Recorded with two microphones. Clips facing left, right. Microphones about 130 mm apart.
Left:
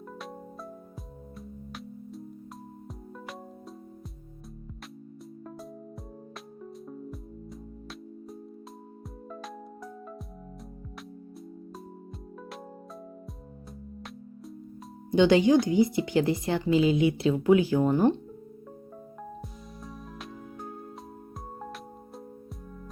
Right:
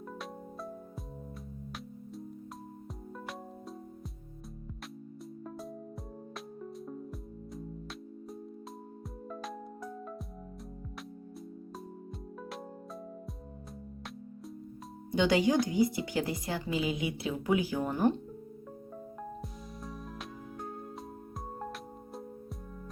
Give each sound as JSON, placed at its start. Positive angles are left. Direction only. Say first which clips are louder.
{"t": 6.6, "sound": "music", "louder": "left 2 dB", "side_deg": 0}
{"t": 9.3, "sound": "music", "louder": "even", "side_deg": 0}
{"t": 15.1, "sound": "speech", "louder": "left 6 dB", "side_deg": 25}
{"t": 19.8, "sound": "music", "louder": "left 1 dB", "side_deg": 0}